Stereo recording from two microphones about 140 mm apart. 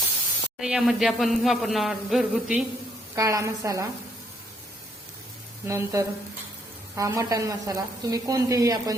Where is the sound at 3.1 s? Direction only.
25° right (ahead or behind).